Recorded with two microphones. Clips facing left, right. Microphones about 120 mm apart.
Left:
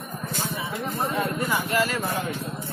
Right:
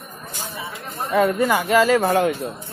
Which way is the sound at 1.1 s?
80° right.